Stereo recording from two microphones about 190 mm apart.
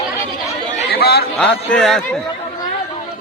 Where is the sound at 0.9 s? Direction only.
55° left (ahead or behind).